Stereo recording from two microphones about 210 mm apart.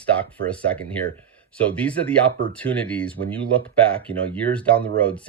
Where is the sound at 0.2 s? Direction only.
5° left (ahead or behind).